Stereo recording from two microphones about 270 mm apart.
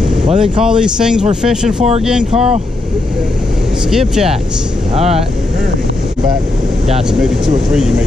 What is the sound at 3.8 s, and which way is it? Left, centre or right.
Speech, centre.